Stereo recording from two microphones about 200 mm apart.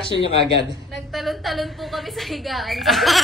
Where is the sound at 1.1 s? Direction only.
Centre (ahead or behind).